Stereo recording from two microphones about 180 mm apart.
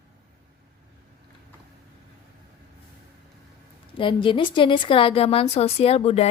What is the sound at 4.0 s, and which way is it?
A woman's voice, 25° left (ahead or behind).